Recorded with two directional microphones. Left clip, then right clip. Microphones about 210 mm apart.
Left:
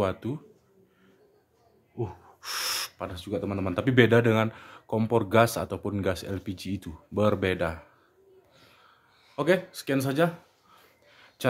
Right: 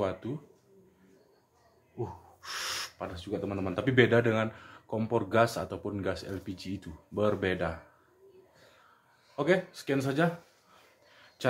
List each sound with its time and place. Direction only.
0.0 s speech: 40° left (ahead or behind)
2.0 s speech: 40° left (ahead or behind)
9.3 s speech: 40° left (ahead or behind)
11.1 s a sound: 30° left (ahead or behind)